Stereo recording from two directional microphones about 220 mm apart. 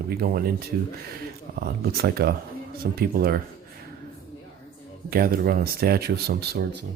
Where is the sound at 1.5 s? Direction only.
45° right (ahead or behind).